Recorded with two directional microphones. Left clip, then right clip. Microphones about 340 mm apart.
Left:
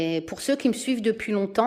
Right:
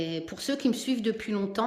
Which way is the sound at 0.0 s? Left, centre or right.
Centre.